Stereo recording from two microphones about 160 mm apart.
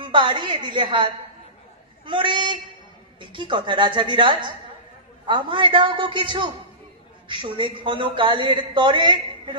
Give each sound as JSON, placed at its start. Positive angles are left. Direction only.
{"t": 0.0, "sound": "a woman's voice", "side_deg": -30}